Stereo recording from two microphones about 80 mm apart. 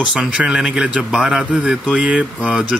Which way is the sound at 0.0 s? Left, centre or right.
Centre.